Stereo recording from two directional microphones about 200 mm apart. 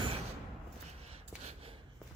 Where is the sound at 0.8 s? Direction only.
30° right (ahead or behind).